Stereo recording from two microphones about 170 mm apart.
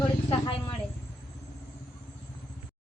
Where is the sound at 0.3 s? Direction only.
35° left (ahead or behind).